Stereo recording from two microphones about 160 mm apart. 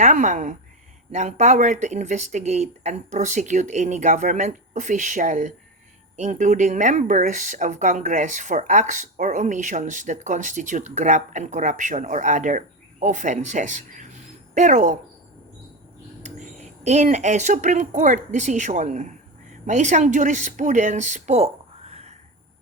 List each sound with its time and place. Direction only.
0.0 s speech: 50° right (ahead or behind)
16.2 s speech: 45° right (ahead or behind)